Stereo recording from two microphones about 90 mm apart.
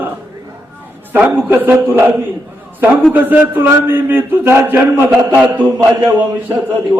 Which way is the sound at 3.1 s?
20° right (ahead or behind).